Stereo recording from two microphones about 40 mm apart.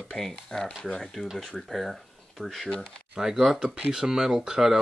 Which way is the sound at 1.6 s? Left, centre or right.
Centre.